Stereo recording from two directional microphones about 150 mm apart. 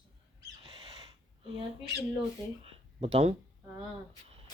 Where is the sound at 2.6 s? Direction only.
40° right (ahead or behind).